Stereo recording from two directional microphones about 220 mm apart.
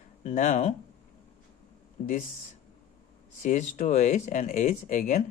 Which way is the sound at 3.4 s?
35° left (ahead or behind).